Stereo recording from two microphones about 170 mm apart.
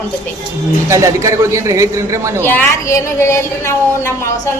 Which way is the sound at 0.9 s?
15° right (ahead or behind).